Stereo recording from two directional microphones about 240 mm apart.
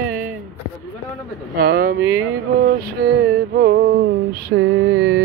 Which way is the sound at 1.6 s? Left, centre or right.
Right.